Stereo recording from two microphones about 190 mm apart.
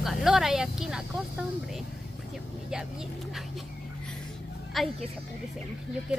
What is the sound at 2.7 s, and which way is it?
A woman's voice, centre (ahead or behind).